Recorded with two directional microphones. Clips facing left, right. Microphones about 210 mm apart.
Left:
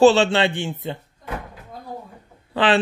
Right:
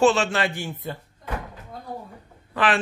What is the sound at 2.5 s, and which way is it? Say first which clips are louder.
Speech: left 4 dB; 30° left (ahead or behind).